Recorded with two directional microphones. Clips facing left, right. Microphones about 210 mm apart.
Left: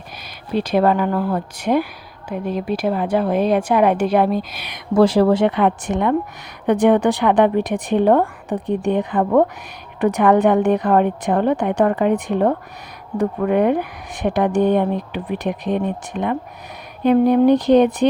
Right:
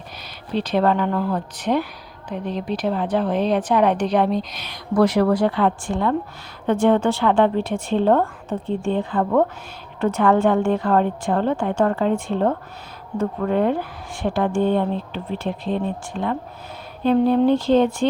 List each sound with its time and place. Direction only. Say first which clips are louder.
0.5 s a woman's voice: left 3 dB; 10° left (ahead or behind)
4.7 s a woman's voice: left 3 dB; 30° left (ahead or behind)